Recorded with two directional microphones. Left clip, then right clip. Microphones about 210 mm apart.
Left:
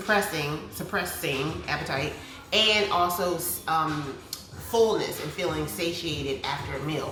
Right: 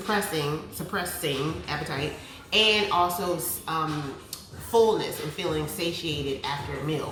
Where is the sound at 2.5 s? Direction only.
15° left (ahead or behind).